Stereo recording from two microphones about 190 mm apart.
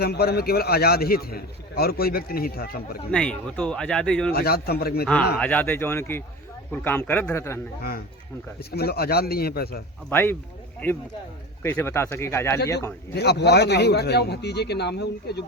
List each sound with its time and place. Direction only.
0.0 s a man's voice: 55° left (ahead or behind)
3.1 s speech: 5° left (ahead or behind)
4.3 s speech: 55° left (ahead or behind)
5.4 s a man's voice: 10° left (ahead or behind)
7.8 s a man's voice: 55° left (ahead or behind)
10.1 s a man's voice: 10° left (ahead or behind)
11.6 s a man's voice: 15° left (ahead or behind)
13.1 s speech: 60° left (ahead or behind)